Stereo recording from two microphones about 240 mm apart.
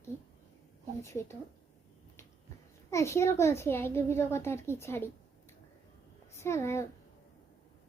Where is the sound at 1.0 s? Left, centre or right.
Centre.